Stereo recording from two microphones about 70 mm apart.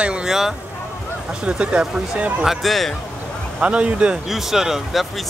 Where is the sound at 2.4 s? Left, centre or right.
Centre.